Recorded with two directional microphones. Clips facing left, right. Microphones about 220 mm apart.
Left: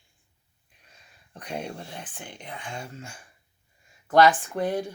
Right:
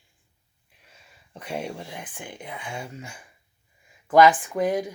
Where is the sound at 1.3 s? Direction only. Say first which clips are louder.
Right 2 dB; 10° right (ahead or behind).